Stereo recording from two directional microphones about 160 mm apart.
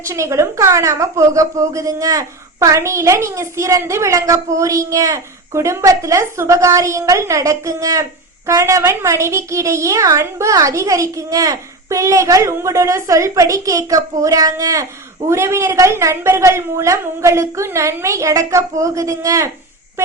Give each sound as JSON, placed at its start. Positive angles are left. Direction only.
{"t": 0.1, "sound": "a woman's voice", "side_deg": -15}